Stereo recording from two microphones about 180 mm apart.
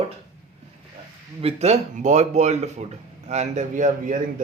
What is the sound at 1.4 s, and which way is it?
Speech, 40° right (ahead or behind).